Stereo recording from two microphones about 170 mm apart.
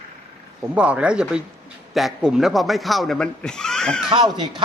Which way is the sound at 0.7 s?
5° right (ahead or behind).